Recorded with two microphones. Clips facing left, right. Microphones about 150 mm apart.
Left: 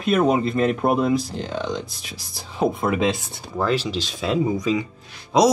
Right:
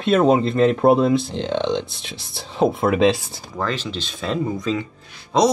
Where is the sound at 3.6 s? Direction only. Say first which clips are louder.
Left 3 dB; 10° left (ahead or behind).